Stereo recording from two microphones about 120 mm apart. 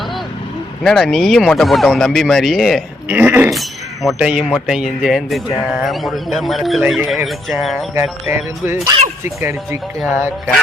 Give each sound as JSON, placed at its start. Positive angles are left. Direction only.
{"t": 0.9, "sound": "a man's voice", "side_deg": 5}
{"t": 3.1, "sound": "speech", "side_deg": -15}
{"t": 3.5, "sound": "a man's voice", "side_deg": 0}
{"t": 8.3, "sound": "speech", "side_deg": -15}